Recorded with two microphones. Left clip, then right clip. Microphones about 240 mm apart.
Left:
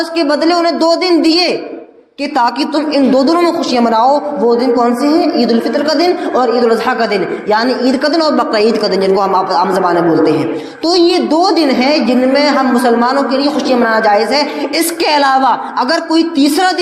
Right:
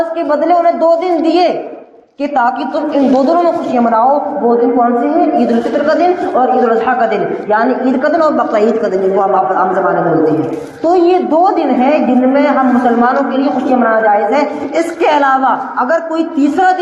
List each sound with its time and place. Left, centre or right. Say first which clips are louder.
0.2 s a woman's voice: even; left
10.8 s a woman's voice: right 1 dB; left